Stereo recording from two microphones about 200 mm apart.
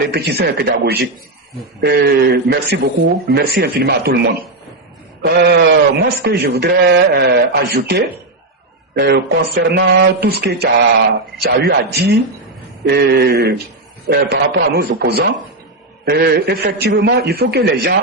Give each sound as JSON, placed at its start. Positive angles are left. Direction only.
{"t": 0.0, "sound": "a man's voice", "side_deg": -55}
{"t": 11.9, "sound": "a man's voice", "side_deg": -55}